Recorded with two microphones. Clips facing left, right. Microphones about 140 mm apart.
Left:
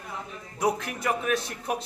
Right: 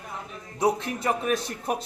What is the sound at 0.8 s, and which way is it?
Speech, 30° right (ahead or behind).